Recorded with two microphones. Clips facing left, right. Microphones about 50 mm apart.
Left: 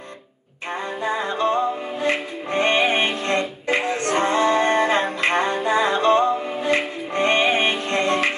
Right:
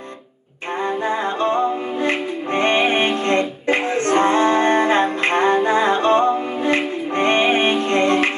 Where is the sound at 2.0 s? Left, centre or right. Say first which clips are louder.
Even; right.